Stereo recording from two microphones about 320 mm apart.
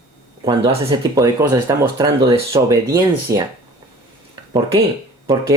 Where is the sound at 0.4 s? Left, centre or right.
Centre.